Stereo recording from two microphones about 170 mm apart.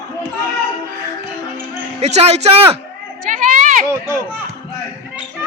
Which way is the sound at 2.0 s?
40° right (ahead or behind).